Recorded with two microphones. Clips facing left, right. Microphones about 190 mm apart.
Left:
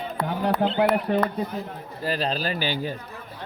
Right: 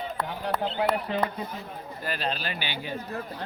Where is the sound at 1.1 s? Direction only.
55° left (ahead or behind).